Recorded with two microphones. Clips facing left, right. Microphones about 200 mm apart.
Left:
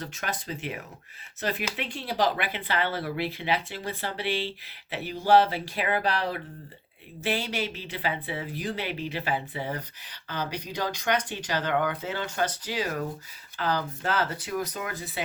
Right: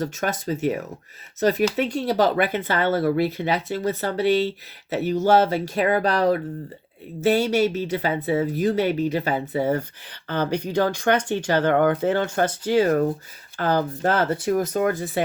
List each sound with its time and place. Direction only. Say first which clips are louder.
0.0 s speech: right 9 dB; 45° right (ahead or behind)